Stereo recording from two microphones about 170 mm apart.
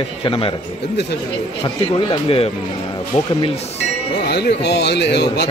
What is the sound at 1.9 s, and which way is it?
Speech, 35° left (ahead or behind).